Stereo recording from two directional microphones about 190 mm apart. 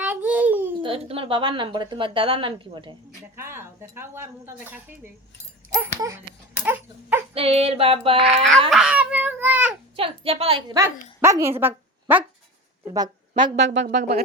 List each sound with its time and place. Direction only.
0.0 s baby cry: 10° right (ahead or behind)
0.8 s speech: 30° right (ahead or behind)
3.3 s speech: 15° right (ahead or behind)
6.7 s dog: 10° right (ahead or behind)
7.3 s a sound: 30° right (ahead or behind)
8.7 s babbling: 5° right (ahead or behind)
9.9 s speech: 30° right (ahead or behind)
10.8 s a woman's voice: 15° right (ahead or behind)
13.7 s speech: 65° right (ahead or behind)